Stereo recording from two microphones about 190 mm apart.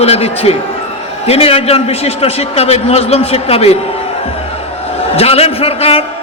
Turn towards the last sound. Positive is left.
turn(degrees=30)  # may be behind; listen again after turning